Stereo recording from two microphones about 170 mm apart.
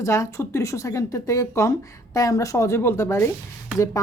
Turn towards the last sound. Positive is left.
turn(degrees=20)  # may be behind; listen again after turning